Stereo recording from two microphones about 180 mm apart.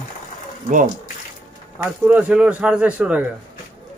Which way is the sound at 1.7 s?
10° right (ahead or behind).